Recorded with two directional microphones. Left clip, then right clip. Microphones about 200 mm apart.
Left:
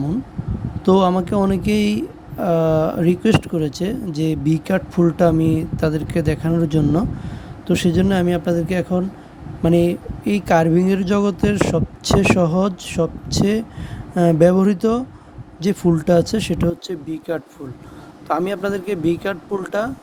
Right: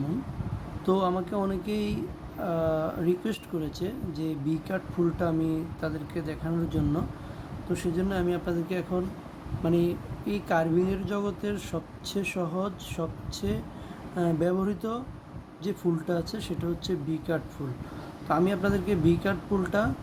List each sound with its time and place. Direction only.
0.9 s speech: 40° left (ahead or behind)